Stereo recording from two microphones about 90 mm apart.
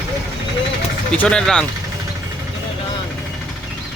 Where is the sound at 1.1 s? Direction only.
15° left (ahead or behind).